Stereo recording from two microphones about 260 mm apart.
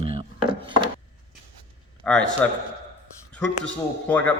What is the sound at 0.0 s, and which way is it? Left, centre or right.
Chopping, right.